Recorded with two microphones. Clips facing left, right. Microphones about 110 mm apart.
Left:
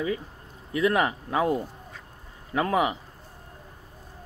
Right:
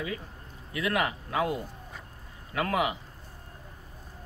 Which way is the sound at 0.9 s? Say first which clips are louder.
Left 4 dB; 35° left (ahead or behind).